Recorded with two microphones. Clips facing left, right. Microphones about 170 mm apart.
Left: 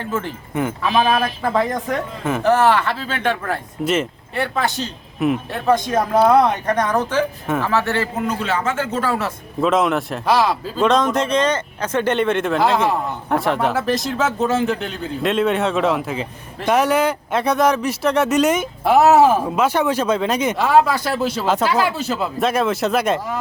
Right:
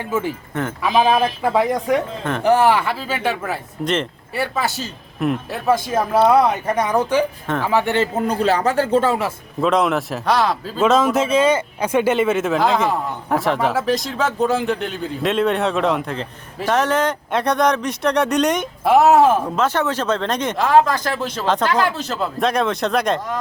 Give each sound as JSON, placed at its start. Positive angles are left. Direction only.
{"t": 0.0, "sound": "speech", "side_deg": -10}
{"t": 8.1, "sound": "a man's voice", "side_deg": -35}
{"t": 9.6, "sound": "speech", "side_deg": 0}